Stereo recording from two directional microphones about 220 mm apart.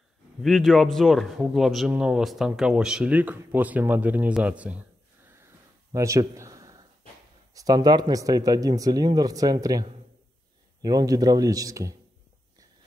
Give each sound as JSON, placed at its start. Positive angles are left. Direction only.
{"t": 0.4, "sound": "speech", "side_deg": 0}
{"t": 5.4, "sound": "a sound", "side_deg": -15}
{"t": 7.5, "sound": "speech", "side_deg": -15}